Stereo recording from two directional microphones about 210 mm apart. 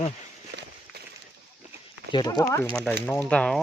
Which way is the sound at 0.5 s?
50° right (ahead or behind).